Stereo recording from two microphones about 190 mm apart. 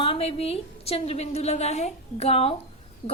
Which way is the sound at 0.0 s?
30° left (ahead or behind).